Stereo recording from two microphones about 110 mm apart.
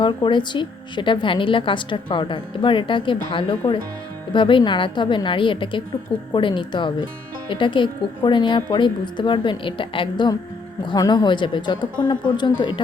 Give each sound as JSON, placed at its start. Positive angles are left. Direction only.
{"t": 0.0, "sound": "a woman's voice", "side_deg": 45}
{"t": 10.8, "sound": "a woman's voice", "side_deg": 40}